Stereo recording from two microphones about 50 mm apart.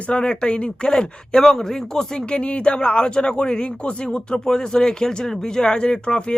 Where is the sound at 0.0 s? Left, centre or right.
Centre.